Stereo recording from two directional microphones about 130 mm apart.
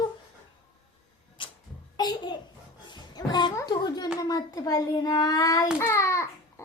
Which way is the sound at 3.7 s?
30° left (ahead or behind).